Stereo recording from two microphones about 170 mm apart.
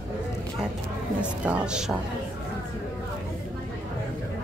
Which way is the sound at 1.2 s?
5° right (ahead or behind).